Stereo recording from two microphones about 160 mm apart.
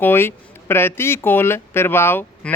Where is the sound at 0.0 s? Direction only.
15° left (ahead or behind).